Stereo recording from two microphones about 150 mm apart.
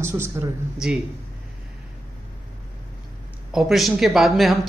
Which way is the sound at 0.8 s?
5° right (ahead or behind).